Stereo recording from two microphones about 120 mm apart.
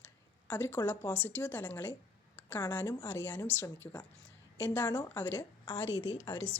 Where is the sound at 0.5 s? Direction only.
15° left (ahead or behind).